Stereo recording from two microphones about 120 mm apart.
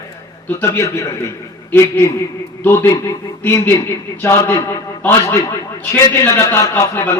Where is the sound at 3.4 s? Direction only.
20° left (ahead or behind).